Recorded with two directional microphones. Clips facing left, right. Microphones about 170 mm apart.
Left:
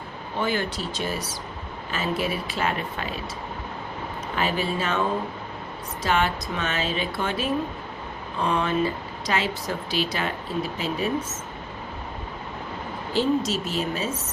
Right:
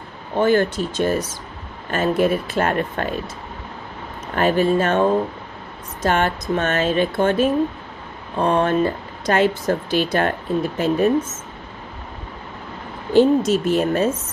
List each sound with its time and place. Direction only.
0.3 s speech: 50° right (ahead or behind)
4.4 s speech: 50° right (ahead or behind)
13.1 s speech: 50° right (ahead or behind)